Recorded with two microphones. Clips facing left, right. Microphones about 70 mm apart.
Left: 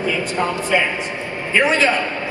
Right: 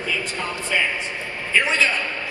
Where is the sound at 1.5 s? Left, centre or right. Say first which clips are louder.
Left 4 dB; left.